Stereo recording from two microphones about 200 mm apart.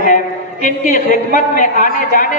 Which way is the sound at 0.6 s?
40° left (ahead or behind).